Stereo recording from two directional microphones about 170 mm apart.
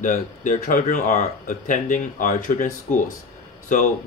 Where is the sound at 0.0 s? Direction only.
50° left (ahead or behind).